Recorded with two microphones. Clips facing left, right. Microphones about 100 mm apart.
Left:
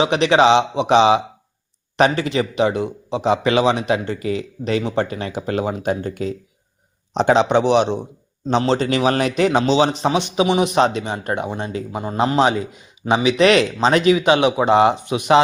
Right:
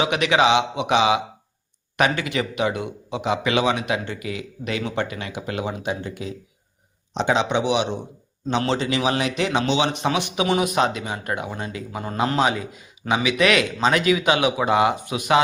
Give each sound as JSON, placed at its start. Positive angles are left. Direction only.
{"t": 0.0, "sound": "speech", "side_deg": 30}